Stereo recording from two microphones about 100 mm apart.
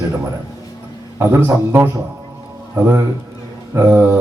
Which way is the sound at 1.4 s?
25° right (ahead or behind).